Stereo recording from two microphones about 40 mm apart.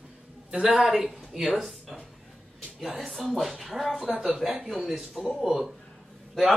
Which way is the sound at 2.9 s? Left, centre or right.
Centre.